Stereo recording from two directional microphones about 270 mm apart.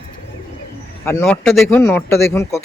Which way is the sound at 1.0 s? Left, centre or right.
Centre.